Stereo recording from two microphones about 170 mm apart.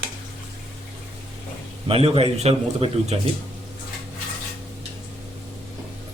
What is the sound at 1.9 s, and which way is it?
A man's voice, 35° right (ahead or behind).